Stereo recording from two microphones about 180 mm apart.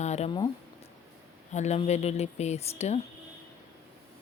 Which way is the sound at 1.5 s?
40° left (ahead or behind).